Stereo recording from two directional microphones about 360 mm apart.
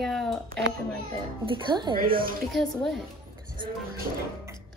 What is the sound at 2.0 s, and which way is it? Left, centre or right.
Speech, right.